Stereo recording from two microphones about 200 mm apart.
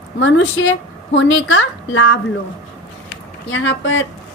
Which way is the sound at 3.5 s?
70° left (ahead or behind).